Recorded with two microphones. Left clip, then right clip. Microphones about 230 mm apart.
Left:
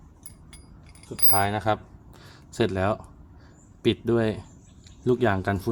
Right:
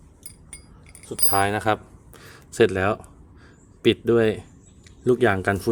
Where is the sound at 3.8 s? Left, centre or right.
Centre.